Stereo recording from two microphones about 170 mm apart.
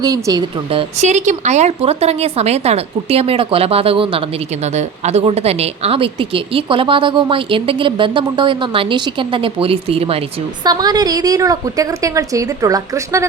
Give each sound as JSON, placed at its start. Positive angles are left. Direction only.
{"t": 0.0, "sound": "a woman's voice", "side_deg": -20}
{"t": 0.7, "sound": "a woman's voice", "side_deg": -35}